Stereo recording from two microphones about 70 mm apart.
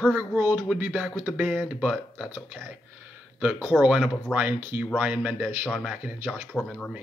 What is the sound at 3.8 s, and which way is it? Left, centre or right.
Speech, centre.